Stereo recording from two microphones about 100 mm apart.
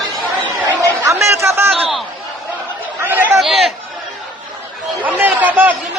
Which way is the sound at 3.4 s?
Centre (ahead or behind).